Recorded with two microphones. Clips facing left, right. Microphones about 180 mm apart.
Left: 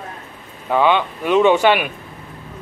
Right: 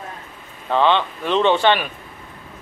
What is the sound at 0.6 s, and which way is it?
Speech, 10° left (ahead or behind).